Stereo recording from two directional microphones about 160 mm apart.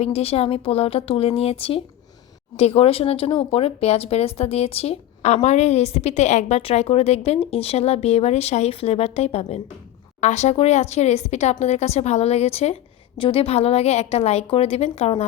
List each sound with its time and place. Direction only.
0.0 s a woman's voice: 40° left (ahead or behind)